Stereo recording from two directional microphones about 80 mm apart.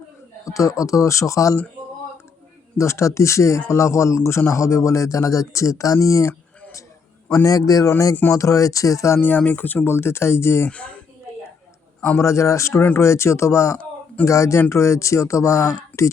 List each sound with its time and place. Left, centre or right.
0.4 s speech: left
2.7 s speech: left
7.4 s speech: left
9.4 s speech: left
10.7 s speech: centre
11.9 s a man's voice: left
12.2 s speech: left